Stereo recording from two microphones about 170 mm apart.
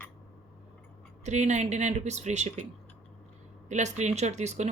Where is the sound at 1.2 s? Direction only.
45° right (ahead or behind).